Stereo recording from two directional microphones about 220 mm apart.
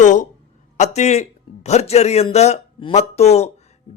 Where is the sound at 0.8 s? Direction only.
30° left (ahead or behind).